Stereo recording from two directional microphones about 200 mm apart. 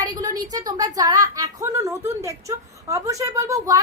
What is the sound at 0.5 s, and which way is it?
A woman's voice, 20° right (ahead or behind).